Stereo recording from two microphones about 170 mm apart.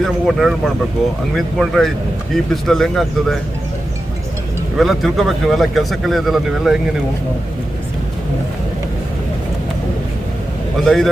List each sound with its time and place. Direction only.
0.0 s speech: centre (ahead or behind)
4.8 s speech: centre (ahead or behind)
10.8 s speech: centre (ahead or behind)